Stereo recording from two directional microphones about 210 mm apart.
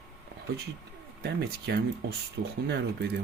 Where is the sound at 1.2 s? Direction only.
50° right (ahead or behind).